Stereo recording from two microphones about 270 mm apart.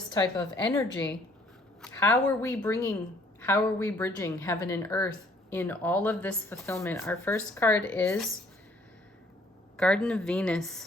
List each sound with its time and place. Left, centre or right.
0.1 s a woman's voice: centre
9.7 s a woman's voice: centre